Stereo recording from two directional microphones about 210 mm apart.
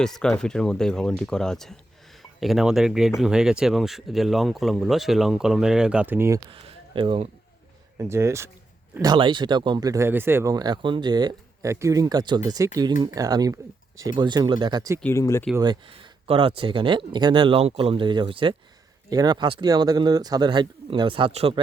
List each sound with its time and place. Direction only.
0.0 s speech: centre (ahead or behind)
6.5 s speech: 25° right (ahead or behind)
7.9 s speech: 15° right (ahead or behind)
15.0 s speech: 15° left (ahead or behind)
15.5 s speech: 20° right (ahead or behind)